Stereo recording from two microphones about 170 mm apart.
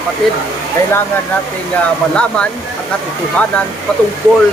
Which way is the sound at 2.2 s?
5° left (ahead or behind).